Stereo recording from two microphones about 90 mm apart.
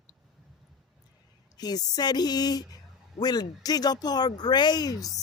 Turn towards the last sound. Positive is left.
turn(degrees=0)  # may be behind; listen again after turning